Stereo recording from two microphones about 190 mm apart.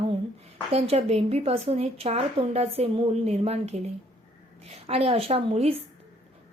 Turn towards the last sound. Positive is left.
turn(degrees=-30)  # may be behind; listen again after turning